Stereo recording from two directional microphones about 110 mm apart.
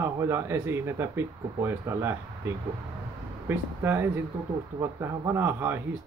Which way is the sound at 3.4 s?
20° right (ahead or behind).